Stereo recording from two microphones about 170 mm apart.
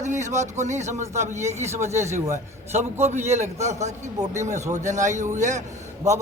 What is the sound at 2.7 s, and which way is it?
A man's voice, 40° right (ahead or behind).